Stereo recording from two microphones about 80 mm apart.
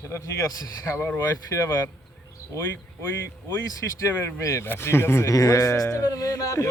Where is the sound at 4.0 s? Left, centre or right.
Left.